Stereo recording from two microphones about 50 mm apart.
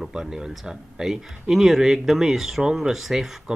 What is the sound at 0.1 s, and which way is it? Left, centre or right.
Speech, centre.